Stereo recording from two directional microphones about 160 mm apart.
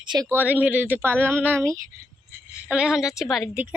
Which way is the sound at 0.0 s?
25° right (ahead or behind).